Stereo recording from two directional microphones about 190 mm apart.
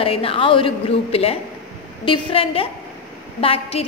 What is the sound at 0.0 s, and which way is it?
A woman's voice, 30° left (ahead or behind).